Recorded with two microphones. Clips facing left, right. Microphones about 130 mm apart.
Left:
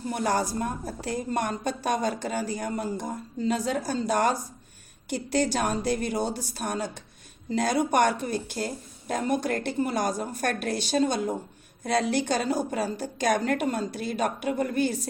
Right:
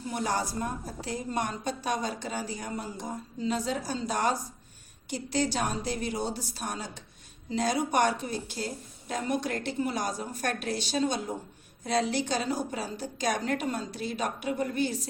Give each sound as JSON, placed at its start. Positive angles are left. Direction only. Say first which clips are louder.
{"t": 0.1, "sound": "a woman's voice", "louder": "left 4 dB", "side_deg": 55}